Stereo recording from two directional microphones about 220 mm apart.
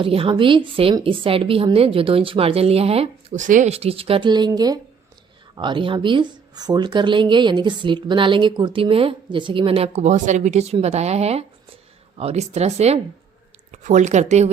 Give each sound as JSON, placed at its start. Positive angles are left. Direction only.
{"t": 0.0, "sound": "speech", "side_deg": -25}